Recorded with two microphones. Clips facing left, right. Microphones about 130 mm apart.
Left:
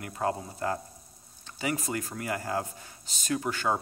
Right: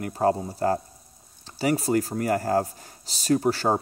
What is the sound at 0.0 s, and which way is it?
Speech, 35° right (ahead or behind).